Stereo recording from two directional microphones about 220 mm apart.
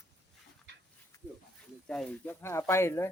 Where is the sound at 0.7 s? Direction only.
55° right (ahead or behind).